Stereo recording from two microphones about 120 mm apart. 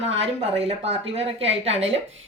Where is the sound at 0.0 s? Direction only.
60° right (ahead or behind).